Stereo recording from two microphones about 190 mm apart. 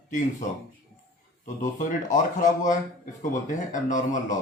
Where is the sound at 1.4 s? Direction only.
40° left (ahead or behind).